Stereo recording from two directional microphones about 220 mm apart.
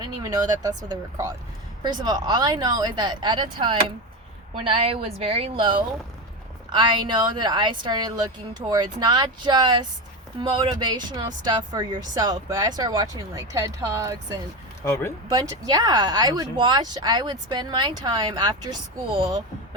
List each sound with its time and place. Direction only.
0.0 s speech: 20° right (ahead or behind)
1.8 s speech: 20° right (ahead or behind)
14.8 s speech: 10° left (ahead or behind)
15.3 s speech: 20° right (ahead or behind)